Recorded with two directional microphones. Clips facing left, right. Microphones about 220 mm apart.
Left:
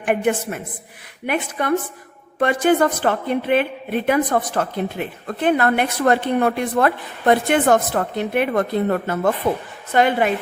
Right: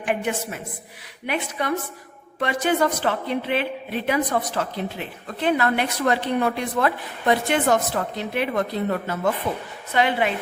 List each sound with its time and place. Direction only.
0.0 s a woman's voice: 55° left (ahead or behind)